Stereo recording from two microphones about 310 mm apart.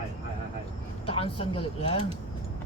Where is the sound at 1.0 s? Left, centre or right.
Centre.